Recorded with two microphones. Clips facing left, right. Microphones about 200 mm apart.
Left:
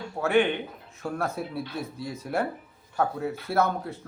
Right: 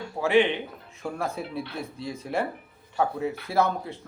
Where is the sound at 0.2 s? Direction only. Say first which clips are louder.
Right 1 dB; centre (ahead or behind).